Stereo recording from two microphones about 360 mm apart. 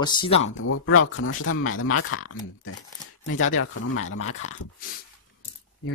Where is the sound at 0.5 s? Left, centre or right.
Left.